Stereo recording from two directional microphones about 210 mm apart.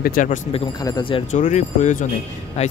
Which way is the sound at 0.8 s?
20° left (ahead or behind).